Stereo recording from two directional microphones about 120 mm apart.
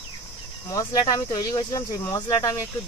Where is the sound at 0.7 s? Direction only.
30° left (ahead or behind).